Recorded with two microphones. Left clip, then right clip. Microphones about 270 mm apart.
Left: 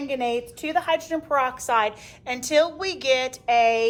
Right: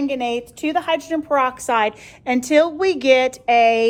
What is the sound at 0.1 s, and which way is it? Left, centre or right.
A woman's voice, right.